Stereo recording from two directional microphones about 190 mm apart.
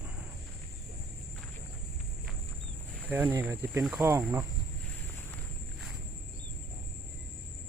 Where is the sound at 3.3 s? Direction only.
15° right (ahead or behind).